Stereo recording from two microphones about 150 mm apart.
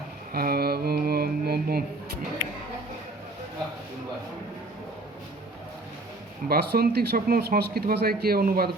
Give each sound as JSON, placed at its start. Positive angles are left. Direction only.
{"t": 0.3, "sound": "mantra", "side_deg": -90}
{"t": 6.5, "sound": "speech", "side_deg": -90}